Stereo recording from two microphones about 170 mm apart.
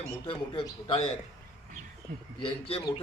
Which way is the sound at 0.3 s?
30° left (ahead or behind).